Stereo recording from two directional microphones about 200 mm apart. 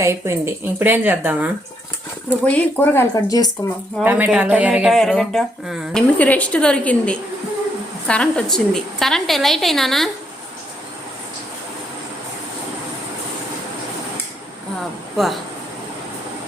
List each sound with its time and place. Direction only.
0.0 s a woman's voice: 15° right (ahead or behind)
2.4 s speech: 5° left (ahead or behind)
4.0 s a woman's voice: 10° right (ahead or behind)
15.1 s speech: centre (ahead or behind)